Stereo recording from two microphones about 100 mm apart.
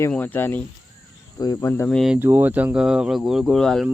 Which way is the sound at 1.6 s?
25° left (ahead or behind).